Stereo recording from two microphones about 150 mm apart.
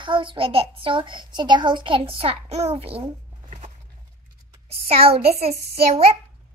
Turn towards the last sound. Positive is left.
turn(degrees=-45)  # may be behind; listen again after turning